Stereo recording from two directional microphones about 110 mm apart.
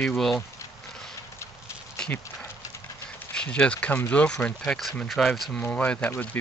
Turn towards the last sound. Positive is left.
turn(degrees=15)  # may be behind; listen again after turning